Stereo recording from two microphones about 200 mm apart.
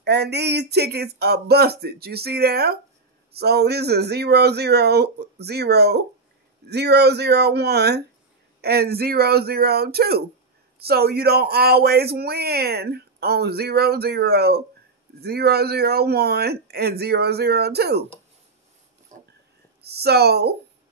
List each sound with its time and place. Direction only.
0.0 s speech: 55° right (ahead or behind)
19.1 s a sound: 35° right (ahead or behind)
19.8 s speech: 55° right (ahead or behind)